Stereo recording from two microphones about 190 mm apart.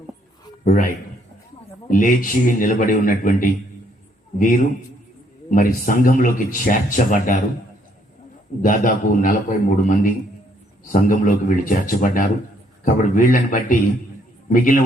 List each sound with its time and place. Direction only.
0.6 s a man's voice: 45° left (ahead or behind)
8.6 s speech: 45° left (ahead or behind)